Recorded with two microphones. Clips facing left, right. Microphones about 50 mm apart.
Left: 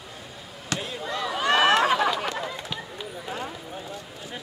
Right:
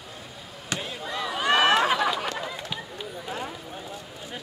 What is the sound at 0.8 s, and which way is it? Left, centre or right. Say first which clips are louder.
Basketball bounce: left 2 dB; centre.